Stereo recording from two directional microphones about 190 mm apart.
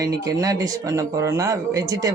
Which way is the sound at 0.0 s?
20° right (ahead or behind).